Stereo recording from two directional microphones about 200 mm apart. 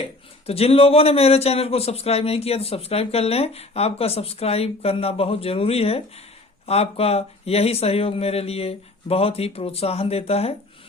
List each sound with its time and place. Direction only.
0.4 s a man's voice: 30° left (ahead or behind)